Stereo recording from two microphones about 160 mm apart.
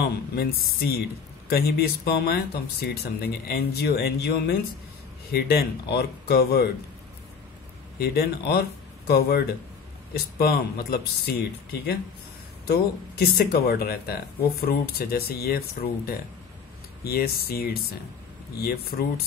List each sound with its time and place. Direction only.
0.0 s speech: 75° left (ahead or behind)
8.0 s speech: 80° left
13.2 s speech: 75° left (ahead or behind)